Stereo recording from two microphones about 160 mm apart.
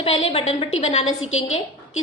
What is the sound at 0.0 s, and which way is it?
A woman's voice, 35° left (ahead or behind).